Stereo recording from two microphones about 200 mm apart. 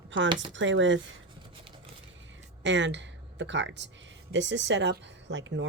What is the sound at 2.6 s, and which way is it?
Speech, 65° right (ahead or behind).